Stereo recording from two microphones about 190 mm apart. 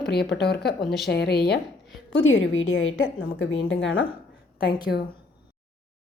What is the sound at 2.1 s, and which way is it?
A woman's voice, 90° left.